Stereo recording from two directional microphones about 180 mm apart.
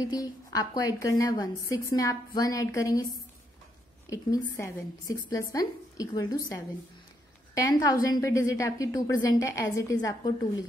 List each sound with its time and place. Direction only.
0.0 s a woman's voice: 20° left (ahead or behind)
4.1 s a woman's voice: 15° left (ahead or behind)